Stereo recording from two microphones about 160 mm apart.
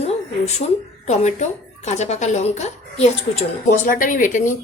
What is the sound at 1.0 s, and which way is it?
A woman's voice, 45° left (ahead or behind).